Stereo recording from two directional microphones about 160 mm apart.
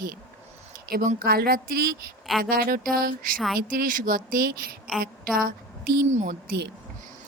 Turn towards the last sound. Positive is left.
turn(degrees=-55)  # may be behind; listen again after turning